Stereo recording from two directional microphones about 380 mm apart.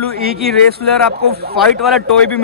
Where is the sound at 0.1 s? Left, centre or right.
Right.